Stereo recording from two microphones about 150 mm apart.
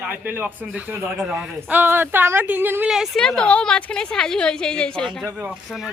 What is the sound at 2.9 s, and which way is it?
A woman's voice, centre (ahead or behind).